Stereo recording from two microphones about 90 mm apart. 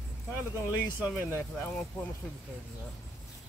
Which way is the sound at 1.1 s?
10° left (ahead or behind).